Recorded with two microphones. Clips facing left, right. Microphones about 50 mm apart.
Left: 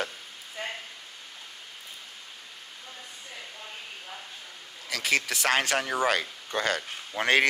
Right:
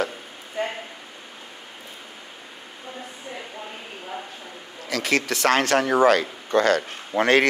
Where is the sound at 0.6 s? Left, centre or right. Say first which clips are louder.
Right 8 dB; centre.